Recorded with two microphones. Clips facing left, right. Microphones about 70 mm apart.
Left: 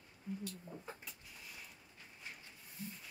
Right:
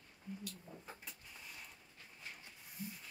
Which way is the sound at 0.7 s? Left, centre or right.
Right.